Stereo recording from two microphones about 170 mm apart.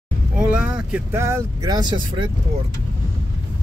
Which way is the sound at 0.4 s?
5° right (ahead or behind).